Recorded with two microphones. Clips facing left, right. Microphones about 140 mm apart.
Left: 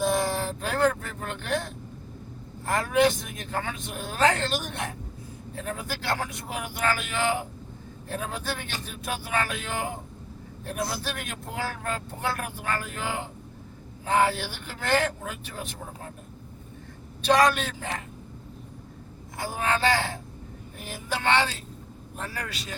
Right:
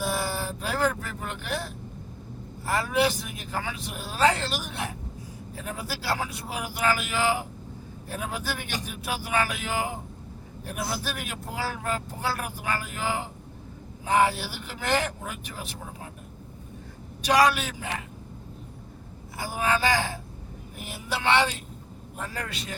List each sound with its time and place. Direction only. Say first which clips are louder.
0.0 s a sound: left 4 dB; 10° right (ahead or behind)
1.4 s vehicle: left 5 dB; 10° right (ahead or behind)
2.6 s speech: left 2 dB; 5° right (ahead or behind)
17.2 s speech: even; 10° right (ahead or behind)
19.4 s speech: even; 10° right (ahead or behind)
22.2 s a man's voice: right 1 dB; 25° right (ahead or behind)